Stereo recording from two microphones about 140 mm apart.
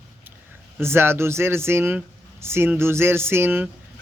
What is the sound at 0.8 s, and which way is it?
Speech, 15° right (ahead or behind).